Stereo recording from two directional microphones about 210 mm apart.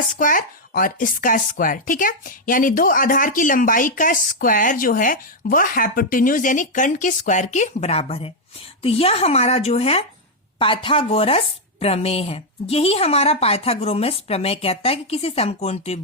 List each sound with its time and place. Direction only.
0.2 s speech: 40° left (ahead or behind)